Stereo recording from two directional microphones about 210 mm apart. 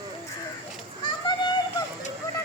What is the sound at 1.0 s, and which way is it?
Children playing, 20° left (ahead or behind).